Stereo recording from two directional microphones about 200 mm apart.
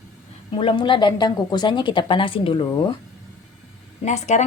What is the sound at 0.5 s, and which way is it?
Speech, 25° left (ahead or behind).